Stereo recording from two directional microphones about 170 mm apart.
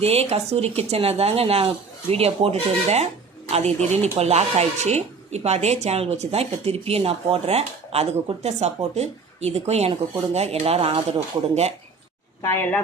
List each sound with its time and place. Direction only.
0.0 s speech: 35° right (ahead or behind)
12.4 s speech: 15° left (ahead or behind)